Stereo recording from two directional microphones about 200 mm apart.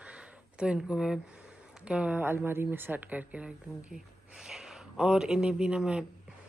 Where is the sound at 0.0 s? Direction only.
5° right (ahead or behind).